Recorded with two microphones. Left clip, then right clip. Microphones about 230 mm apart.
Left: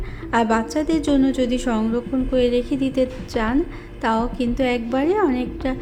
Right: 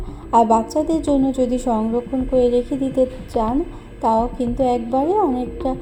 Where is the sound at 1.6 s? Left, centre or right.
Left.